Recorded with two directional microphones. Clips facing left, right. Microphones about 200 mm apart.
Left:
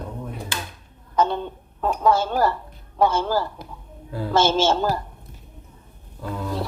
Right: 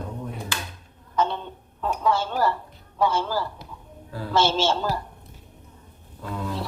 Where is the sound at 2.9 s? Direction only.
45° left (ahead or behind).